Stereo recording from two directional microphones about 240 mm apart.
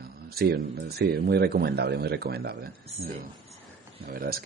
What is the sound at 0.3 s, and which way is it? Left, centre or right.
Speech, right.